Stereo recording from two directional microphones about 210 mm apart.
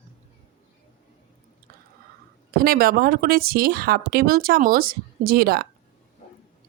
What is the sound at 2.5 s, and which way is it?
Speech, 45° right (ahead or behind).